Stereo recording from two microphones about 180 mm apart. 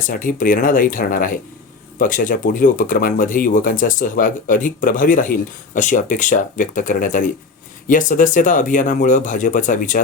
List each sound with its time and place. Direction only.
0.1 s speech: 50° left (ahead or behind)